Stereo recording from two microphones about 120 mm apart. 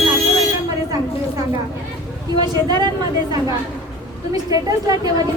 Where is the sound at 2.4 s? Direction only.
35° right (ahead or behind).